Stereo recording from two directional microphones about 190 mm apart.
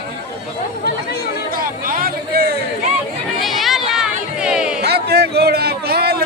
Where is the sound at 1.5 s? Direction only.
50° right (ahead or behind).